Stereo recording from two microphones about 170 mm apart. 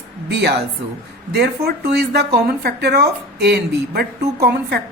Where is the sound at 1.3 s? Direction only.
70° right (ahead or behind).